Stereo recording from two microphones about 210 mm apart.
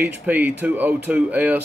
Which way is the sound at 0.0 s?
10° right (ahead or behind).